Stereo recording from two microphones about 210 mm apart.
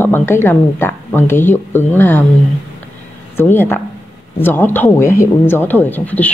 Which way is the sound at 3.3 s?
10° left (ahead or behind).